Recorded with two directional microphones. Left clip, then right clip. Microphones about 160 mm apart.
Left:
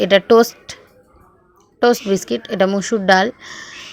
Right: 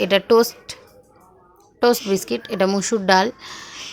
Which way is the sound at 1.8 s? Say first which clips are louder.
Left 3 dB; 20° left (ahead or behind).